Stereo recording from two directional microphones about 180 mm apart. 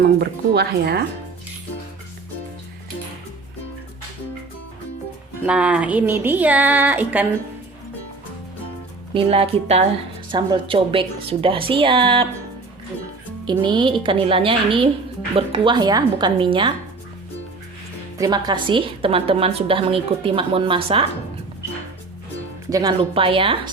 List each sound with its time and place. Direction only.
0.0 s speech: 65° right (ahead or behind)
5.5 s speech: 5° right (ahead or behind)
9.1 s a woman's voice: 35° right (ahead or behind)
13.5 s a woman's voice: 25° right (ahead or behind)
18.2 s a woman's voice: 25° right (ahead or behind)
22.7 s a woman's voice: 25° right (ahead or behind)